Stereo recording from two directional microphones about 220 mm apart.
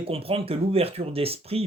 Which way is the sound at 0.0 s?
25° right (ahead or behind).